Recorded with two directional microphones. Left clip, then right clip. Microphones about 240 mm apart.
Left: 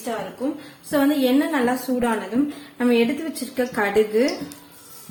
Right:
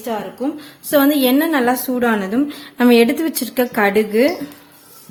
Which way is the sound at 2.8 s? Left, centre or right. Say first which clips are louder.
Right 7 dB; right.